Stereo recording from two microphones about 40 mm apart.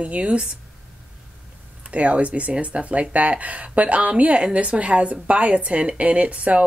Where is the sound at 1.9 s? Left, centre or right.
Right.